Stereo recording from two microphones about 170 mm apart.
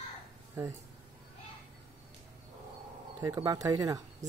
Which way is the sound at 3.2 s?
20° right (ahead or behind).